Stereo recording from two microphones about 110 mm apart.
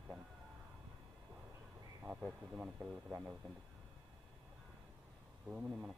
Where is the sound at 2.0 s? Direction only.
10° right (ahead or behind).